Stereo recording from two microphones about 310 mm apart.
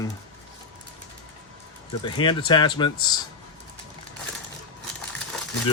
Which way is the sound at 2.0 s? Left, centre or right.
Centre.